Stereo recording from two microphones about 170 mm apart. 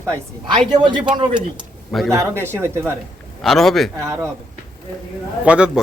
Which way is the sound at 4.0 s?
15° right (ahead or behind).